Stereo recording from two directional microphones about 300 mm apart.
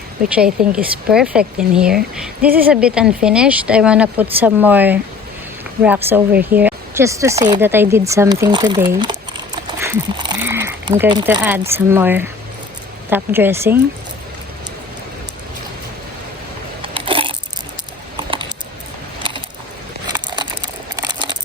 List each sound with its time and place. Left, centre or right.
0.3 s speech: centre
16.8 s biting: centre
18.2 s typing: centre
19.2 s a sound: centre